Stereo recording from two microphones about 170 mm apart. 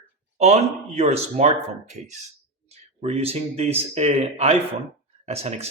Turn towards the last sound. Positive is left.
turn(degrees=-35)  # may be behind; listen again after turning